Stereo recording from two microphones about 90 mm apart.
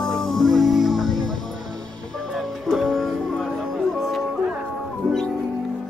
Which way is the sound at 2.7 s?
Centre (ahead or behind).